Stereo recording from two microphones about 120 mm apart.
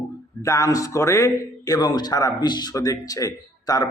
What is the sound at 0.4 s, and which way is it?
Speech, 25° left (ahead or behind).